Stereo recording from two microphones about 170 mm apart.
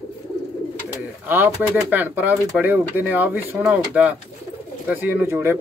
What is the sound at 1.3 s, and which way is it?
Speech, 10° right (ahead or behind).